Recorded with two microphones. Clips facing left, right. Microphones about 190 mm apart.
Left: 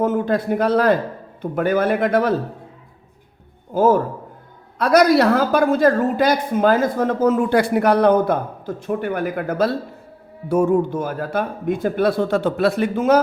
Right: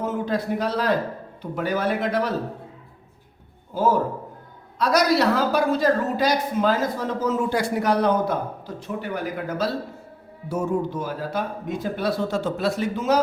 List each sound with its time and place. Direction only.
0.0 s a man's voice: 55° left (ahead or behind)
3.8 s a man's voice: 50° left (ahead or behind)